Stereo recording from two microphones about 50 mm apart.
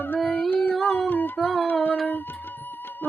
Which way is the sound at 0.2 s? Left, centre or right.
Left.